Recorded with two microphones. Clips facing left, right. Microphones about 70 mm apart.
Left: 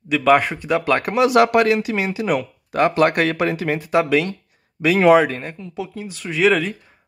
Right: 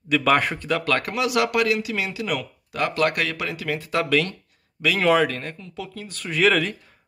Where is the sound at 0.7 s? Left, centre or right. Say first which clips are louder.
Left 6 dB; centre.